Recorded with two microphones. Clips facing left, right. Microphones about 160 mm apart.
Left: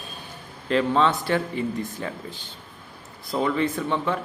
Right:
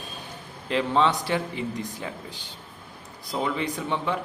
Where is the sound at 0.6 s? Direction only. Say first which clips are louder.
Left 2 dB; 15° right (ahead or behind).